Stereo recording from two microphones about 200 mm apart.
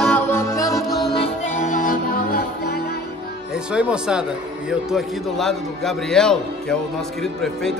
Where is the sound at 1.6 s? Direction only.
40° left (ahead or behind).